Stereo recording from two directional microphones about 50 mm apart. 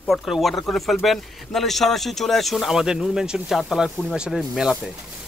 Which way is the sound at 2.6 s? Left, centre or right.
Centre.